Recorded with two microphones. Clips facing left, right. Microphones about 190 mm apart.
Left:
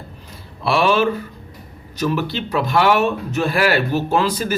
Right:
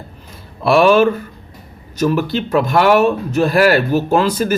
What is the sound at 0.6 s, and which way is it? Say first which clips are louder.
Speech: right 6 dB; 50° right (ahead or behind).